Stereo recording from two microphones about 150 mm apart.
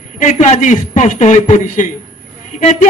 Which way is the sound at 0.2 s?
50° left (ahead or behind).